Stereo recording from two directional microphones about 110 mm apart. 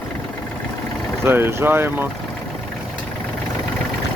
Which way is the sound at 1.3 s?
20° right (ahead or behind).